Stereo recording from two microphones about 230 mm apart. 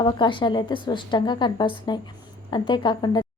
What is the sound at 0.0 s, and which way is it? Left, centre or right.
A woman's voice, left.